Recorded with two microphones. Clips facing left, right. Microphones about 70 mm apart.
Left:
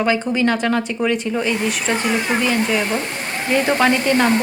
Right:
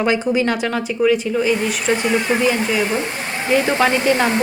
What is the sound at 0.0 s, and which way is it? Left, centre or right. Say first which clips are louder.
Speech: right 1 dB; centre.